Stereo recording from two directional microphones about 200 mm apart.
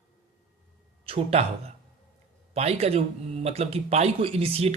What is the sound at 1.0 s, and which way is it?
Speech, 30° right (ahead or behind).